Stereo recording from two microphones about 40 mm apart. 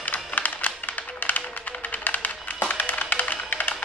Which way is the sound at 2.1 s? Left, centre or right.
Left.